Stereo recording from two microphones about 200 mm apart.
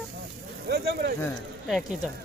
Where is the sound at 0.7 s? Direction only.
55° right (ahead or behind).